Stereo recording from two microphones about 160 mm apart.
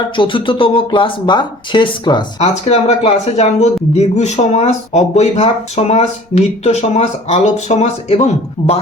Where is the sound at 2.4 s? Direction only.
40° left (ahead or behind).